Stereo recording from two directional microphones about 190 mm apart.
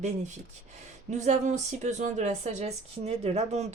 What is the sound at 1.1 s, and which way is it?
Speech, 40° right (ahead or behind).